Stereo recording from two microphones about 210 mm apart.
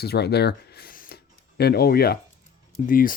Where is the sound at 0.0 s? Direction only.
50° left (ahead or behind).